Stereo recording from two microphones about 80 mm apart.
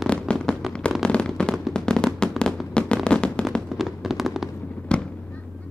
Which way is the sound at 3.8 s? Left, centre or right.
Centre.